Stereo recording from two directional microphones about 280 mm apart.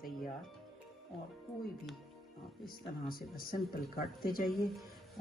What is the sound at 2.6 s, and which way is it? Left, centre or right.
Speech, left.